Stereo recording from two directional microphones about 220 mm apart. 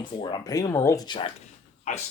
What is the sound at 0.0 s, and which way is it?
Speech, 20° left (ahead or behind).